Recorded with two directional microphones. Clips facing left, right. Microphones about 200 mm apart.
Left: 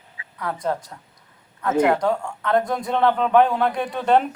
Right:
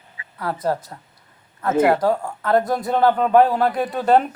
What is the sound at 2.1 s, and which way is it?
A man's voice, 35° right (ahead or behind).